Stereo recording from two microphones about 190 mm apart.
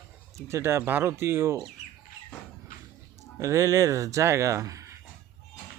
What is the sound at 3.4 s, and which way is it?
Speech, 15° right (ahead or behind).